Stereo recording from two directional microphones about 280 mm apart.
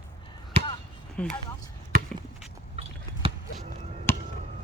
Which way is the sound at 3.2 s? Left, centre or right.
Centre.